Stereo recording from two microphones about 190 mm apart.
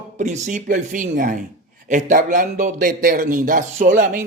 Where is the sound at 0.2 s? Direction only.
40° right (ahead or behind).